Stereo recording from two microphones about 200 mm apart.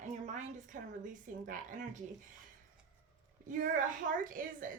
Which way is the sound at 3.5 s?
40° right (ahead or behind).